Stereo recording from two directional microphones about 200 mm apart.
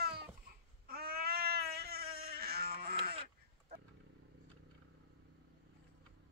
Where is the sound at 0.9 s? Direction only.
50° right (ahead or behind).